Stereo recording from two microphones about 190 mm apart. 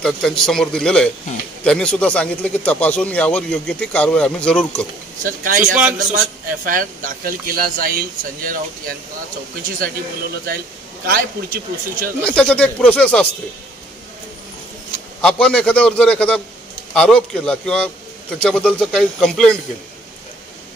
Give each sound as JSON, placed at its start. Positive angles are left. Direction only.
{"t": 0.0, "sound": "a man's voice", "side_deg": 0}
{"t": 5.2, "sound": "a man's voice", "side_deg": -45}
{"t": 5.6, "sound": "a man's voice", "side_deg": -5}
{"t": 5.9, "sound": "a man's voice", "side_deg": -45}
{"t": 11.1, "sound": "a man's voice", "side_deg": -50}
{"t": 12.3, "sound": "a man's voice", "side_deg": 5}
{"t": 15.2, "sound": "a man's voice", "side_deg": 5}